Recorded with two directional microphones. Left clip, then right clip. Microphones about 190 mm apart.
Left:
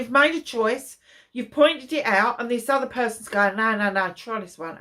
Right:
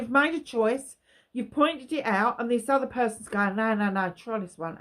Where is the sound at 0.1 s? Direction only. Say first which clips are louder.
Left 5 dB; 50° right (ahead or behind).